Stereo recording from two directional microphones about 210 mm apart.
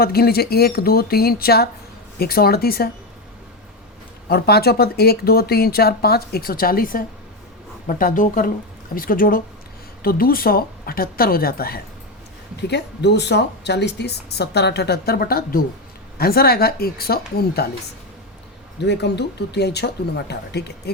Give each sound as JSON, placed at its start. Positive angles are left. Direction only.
{"t": 0.0, "sound": "a woman's voice", "side_deg": 45}
{"t": 4.3, "sound": "a woman's voice", "side_deg": 50}
{"t": 18.8, "sound": "a woman's voice", "side_deg": 55}